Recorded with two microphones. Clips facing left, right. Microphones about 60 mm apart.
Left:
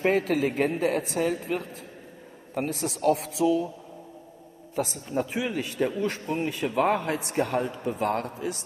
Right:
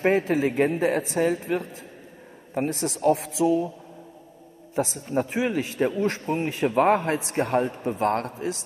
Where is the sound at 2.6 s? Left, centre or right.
Right.